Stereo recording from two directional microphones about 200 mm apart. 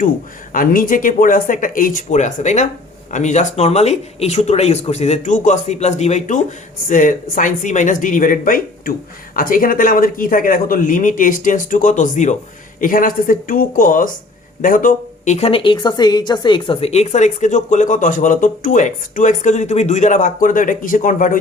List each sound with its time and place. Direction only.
0.5 s a woman's voice: 45° left (ahead or behind)